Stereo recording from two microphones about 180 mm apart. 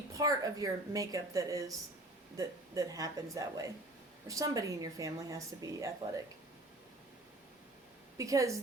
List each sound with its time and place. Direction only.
0.2 s speech: 20° right (ahead or behind)
8.2 s a woman's voice: 20° right (ahead or behind)